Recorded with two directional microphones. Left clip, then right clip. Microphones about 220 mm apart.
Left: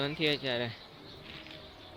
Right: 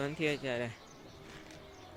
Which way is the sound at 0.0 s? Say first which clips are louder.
Left 3 dB; centre (ahead or behind).